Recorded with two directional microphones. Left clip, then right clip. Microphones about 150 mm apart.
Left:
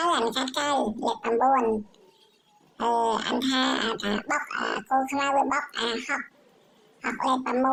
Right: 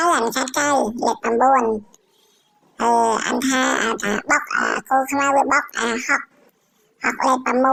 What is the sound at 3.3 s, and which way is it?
Speech, 35° right (ahead or behind).